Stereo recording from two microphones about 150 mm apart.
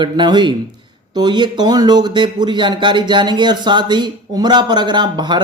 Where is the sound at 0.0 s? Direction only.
30° right (ahead or behind).